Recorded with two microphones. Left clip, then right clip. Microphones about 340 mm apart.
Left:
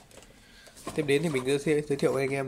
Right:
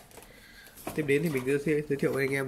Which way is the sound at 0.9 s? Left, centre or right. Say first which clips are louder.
Left 1 dB; centre.